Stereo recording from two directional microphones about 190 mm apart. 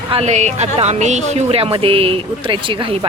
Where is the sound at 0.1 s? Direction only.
35° right (ahead or behind).